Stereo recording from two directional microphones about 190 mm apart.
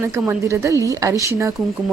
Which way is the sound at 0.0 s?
15° right (ahead or behind).